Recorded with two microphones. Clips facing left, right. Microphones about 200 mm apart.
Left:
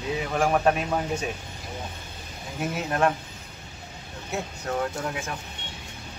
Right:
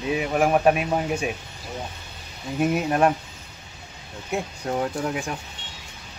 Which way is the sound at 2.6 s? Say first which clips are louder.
Right 5 dB; 15° right (ahead or behind).